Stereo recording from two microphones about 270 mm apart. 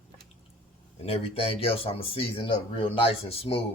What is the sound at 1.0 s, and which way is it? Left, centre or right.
Speech, left.